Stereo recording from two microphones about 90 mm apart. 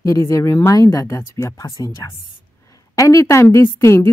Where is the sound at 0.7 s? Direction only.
40° left (ahead or behind).